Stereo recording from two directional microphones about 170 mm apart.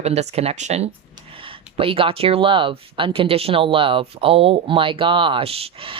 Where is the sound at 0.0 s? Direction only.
40° right (ahead or behind).